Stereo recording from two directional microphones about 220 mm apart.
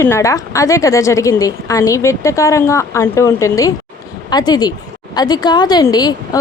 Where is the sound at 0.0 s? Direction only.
10° left (ahead or behind).